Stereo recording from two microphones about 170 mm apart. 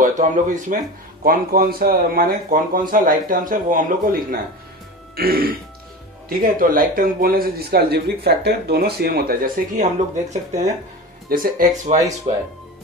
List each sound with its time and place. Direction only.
0.0 s speech: 50° right (ahead or behind)
1.2 s a man's voice: 60° right (ahead or behind)
11.2 s a man's voice: 55° right (ahead or behind)
12.3 s speech: 35° right (ahead or behind)